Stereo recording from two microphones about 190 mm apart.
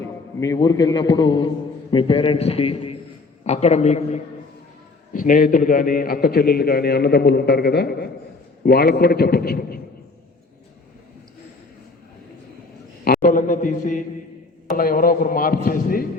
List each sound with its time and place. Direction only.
0.3 s a man's voice: 15° left (ahead or behind); by 9.8 s 50° left (ahead or behind)
13.1 s a man's voice: 45° left (ahead or behind)